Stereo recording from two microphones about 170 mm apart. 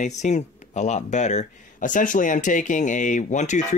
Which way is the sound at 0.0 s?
45° left (ahead or behind).